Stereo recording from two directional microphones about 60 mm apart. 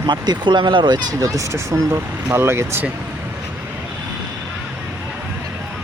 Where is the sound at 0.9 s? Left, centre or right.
Right.